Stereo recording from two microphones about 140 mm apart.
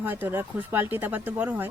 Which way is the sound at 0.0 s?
15° right (ahead or behind).